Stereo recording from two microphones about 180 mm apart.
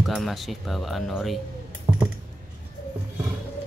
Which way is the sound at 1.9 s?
25° right (ahead or behind).